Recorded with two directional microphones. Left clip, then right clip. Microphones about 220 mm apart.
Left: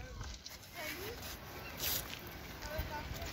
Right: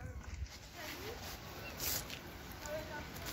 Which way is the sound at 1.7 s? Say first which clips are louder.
Left 2 dB; 40° left (ahead or behind).